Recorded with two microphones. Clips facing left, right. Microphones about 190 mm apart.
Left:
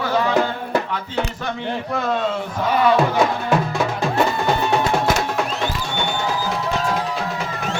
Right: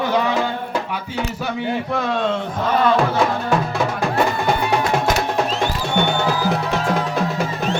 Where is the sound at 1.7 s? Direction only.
Centre (ahead or behind).